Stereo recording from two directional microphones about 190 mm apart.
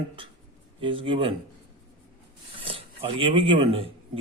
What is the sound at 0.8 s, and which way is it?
Speech, 25° right (ahead or behind).